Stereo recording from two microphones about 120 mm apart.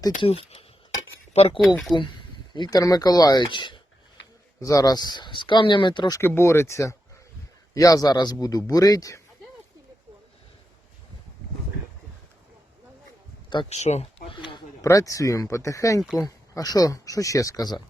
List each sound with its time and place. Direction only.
0.2 s speech: 50° left (ahead or behind)
1.9 s speech: 40° left (ahead or behind)
4.6 s speech: 30° left (ahead or behind)
6.1 s speech: 20° left (ahead or behind)
13.7 s speech: 65° left (ahead or behind)
14.3 s a sound: 45° left (ahead or behind)
14.8 s speech: 25° left (ahead or behind)